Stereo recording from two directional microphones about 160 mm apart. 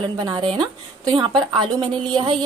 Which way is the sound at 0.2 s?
30° right (ahead or behind).